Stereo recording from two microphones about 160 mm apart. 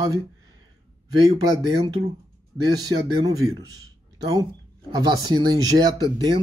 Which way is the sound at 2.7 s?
25° right (ahead or behind).